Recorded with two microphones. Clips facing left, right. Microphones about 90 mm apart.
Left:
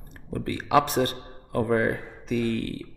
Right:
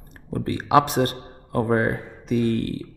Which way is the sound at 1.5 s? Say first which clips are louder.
Right 2 dB; 40° right (ahead or behind).